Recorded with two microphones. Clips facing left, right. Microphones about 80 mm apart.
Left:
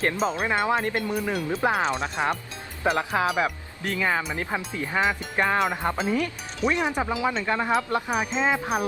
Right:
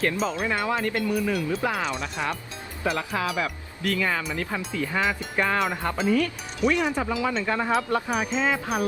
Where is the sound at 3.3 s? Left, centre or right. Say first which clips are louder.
Left 3 dB; left.